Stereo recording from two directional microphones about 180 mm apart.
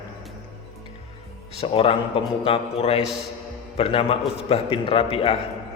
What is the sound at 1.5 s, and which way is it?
A man's voice, 30° left (ahead or behind).